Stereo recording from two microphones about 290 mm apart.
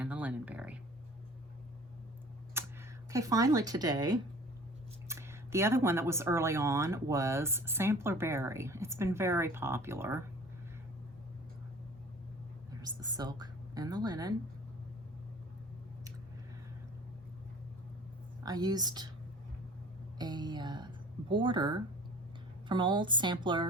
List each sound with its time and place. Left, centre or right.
0.0 s a sound: centre
2.5 s computer keyboard: centre
3.1 s speech: centre
12.8 s a sound: centre
13.4 s a woman's voice: centre
18.4 s speech: centre
20.1 s speech: centre